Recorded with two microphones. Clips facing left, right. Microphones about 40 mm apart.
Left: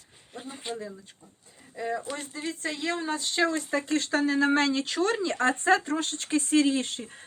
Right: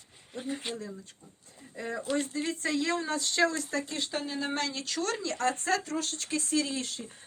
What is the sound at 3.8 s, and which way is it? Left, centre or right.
Speech, left.